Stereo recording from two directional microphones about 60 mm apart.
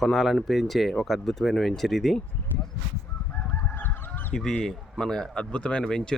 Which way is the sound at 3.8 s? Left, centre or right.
Left.